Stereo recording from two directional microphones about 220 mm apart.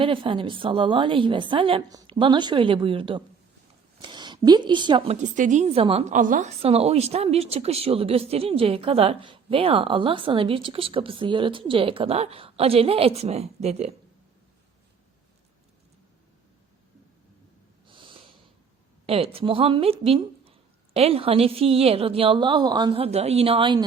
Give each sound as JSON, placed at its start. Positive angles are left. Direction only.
{"t": 0.0, "sound": "a woman's voice", "side_deg": -25}
{"t": 5.2, "sound": "a woman's voice", "side_deg": -35}
{"t": 17.8, "sound": "snort", "side_deg": -20}
{"t": 19.0, "sound": "a woman's voice", "side_deg": -25}